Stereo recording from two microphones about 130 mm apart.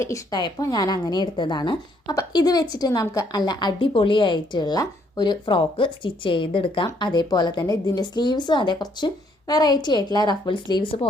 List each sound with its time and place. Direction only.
0.0 s a woman's voice: 25° left (ahead or behind)